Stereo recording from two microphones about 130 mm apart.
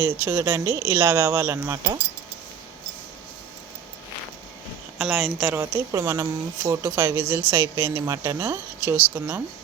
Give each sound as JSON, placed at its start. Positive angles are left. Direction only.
{"t": 0.0, "sound": "speech", "side_deg": -15}
{"t": 4.9, "sound": "a woman's voice", "side_deg": -5}
{"t": 5.5, "sound": "a woman's voice", "side_deg": -25}